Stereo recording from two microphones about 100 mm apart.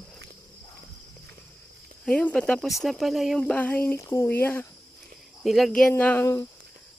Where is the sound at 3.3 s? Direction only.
10° left (ahead or behind).